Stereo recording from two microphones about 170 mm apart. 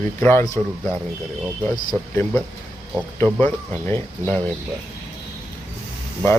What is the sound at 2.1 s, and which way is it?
Speech, 10° left (ahead or behind).